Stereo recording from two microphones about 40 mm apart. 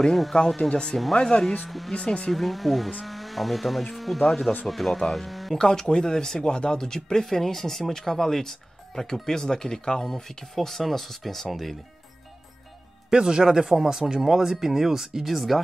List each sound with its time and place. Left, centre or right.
0.1 s speech: centre
0.6 s speech: centre
1.7 s speech: centre
2.0 s speech: left
2.3 s speech: centre
5.6 s speech: centre
13.1 s speech: centre